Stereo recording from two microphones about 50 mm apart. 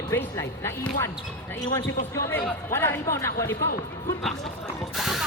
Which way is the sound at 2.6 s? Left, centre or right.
Left.